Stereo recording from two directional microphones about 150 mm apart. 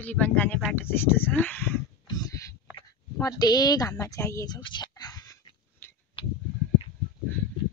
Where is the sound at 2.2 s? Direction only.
20° left (ahead or behind).